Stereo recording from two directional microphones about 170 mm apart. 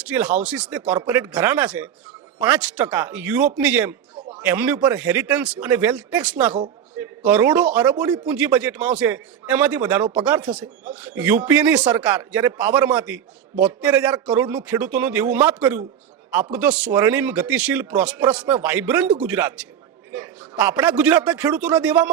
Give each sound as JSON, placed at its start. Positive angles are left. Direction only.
{"t": 0.0, "sound": "a man's voice", "side_deg": -10}